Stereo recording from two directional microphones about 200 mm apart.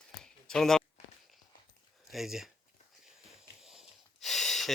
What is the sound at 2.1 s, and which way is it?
Speech, centre (ahead or behind).